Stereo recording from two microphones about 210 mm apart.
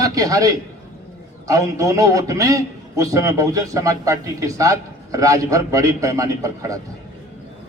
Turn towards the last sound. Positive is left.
turn(degrees=-15)  # may be behind; listen again after turning